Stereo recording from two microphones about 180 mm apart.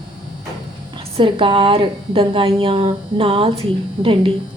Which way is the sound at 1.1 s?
30° right (ahead or behind).